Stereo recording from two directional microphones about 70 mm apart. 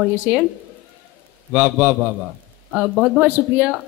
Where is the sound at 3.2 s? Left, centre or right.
Right.